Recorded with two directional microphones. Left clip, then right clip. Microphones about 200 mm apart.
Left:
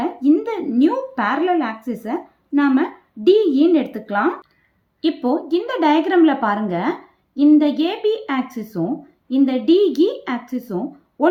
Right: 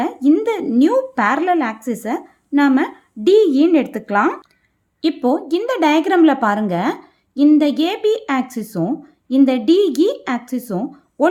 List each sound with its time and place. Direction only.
0.0 s speech: 40° right (ahead or behind)